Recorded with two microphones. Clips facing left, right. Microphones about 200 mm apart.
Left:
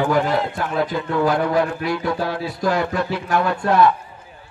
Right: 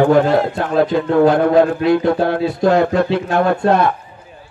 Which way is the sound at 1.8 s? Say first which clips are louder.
Right 8 dB; 55° right (ahead or behind).